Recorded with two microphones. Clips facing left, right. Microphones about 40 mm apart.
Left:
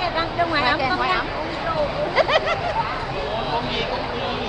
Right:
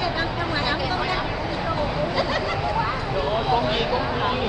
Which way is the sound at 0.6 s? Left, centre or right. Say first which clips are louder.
Left 4 dB; left.